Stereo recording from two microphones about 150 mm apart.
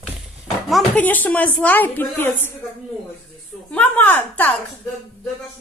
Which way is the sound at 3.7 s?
10° left (ahead or behind).